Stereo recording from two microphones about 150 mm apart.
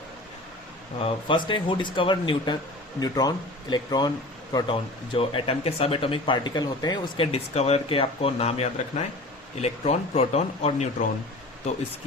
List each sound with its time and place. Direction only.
0.9 s speech: 35° left (ahead or behind)
7.3 s speech: 45° left (ahead or behind)